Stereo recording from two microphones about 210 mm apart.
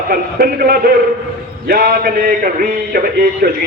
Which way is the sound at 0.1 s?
45° right (ahead or behind).